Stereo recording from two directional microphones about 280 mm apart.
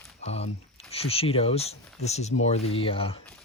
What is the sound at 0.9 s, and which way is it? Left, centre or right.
Speech, left.